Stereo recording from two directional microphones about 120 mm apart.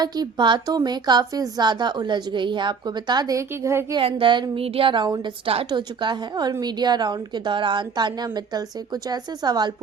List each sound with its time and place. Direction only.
0.0 s a woman's voice: 35° right (ahead or behind)
3.5 s a woman's voice: 20° right (ahead or behind)
3.9 s a woman's voice: 45° right (ahead or behind)
4.6 s speech: 50° right (ahead or behind)
5.2 s speech: 55° right (ahead or behind)
5.7 s a woman's voice: 40° right (ahead or behind)